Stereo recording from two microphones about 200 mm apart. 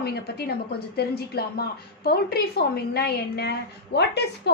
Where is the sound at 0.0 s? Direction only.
55° left (ahead or behind).